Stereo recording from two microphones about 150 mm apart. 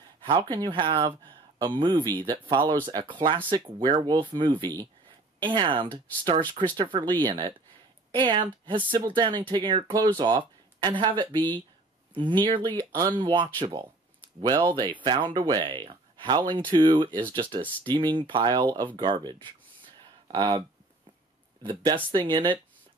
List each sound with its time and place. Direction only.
0.2 s speech: 30° right (ahead or behind)
21.6 s speech: 30° right (ahead or behind)